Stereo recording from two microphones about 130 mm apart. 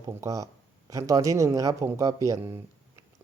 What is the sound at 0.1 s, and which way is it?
Speech, 25° right (ahead or behind).